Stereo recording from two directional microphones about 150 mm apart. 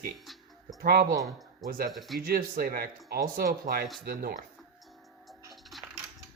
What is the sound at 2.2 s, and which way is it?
Speech, 75° right (ahead or behind).